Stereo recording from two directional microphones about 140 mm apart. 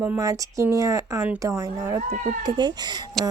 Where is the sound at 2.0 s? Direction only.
45° right (ahead or behind).